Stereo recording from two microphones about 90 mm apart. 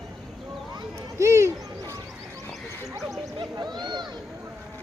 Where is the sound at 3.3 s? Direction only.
55° right (ahead or behind).